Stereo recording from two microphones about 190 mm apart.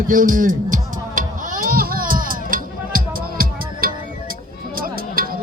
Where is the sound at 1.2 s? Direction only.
45° right (ahead or behind).